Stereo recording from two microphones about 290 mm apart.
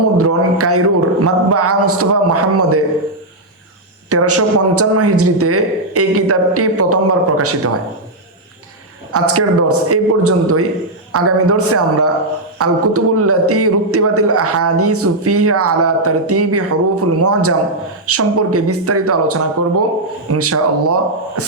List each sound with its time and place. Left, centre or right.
0.2 s a man's voice: right
4.1 s a man's voice: right
9.1 s a man's voice: right